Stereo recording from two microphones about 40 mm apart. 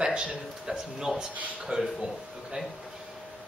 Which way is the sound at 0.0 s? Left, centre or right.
Right.